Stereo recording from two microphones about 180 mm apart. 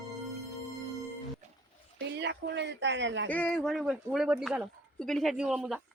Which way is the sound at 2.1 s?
75° right (ahead or behind).